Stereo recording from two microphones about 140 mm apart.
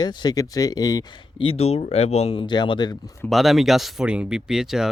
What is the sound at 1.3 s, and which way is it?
Speech, 45° left (ahead or behind).